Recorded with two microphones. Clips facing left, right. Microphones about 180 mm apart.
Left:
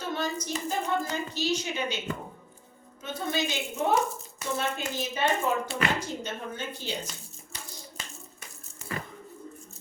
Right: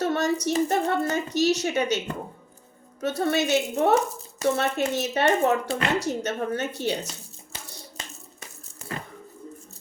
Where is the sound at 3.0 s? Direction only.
75° right (ahead or behind).